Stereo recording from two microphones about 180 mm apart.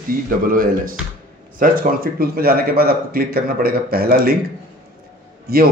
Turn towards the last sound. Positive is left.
turn(degrees=-55)  # may be behind; listen again after turning